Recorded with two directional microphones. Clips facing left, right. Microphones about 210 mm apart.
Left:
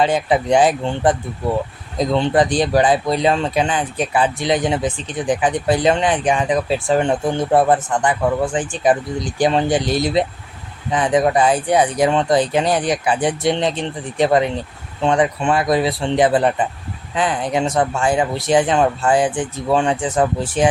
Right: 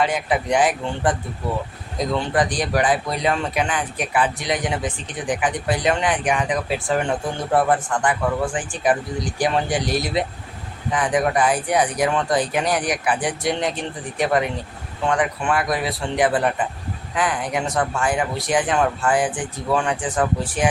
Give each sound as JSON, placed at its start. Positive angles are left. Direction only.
{"t": 0.0, "sound": "speech", "side_deg": 30}
{"t": 2.1, "sound": "speech", "side_deg": 25}